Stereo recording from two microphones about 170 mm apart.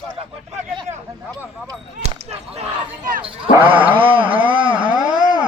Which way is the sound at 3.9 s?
30° right (ahead or behind).